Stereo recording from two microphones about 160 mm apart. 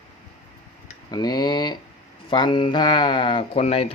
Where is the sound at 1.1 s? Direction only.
25° left (ahead or behind).